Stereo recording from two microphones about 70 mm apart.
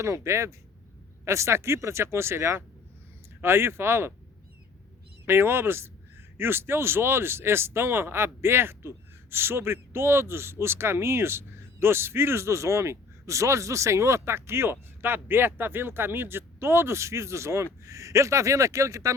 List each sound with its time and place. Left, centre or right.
0.0 s speech: right
5.2 s speech: right